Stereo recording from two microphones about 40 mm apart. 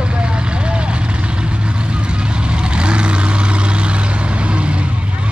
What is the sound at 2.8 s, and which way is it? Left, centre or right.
Vehicle, right.